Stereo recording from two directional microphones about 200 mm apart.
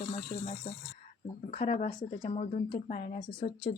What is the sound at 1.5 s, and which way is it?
A woman's voice, 35° left (ahead or behind).